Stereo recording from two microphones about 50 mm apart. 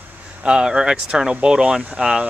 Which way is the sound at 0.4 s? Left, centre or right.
Centre.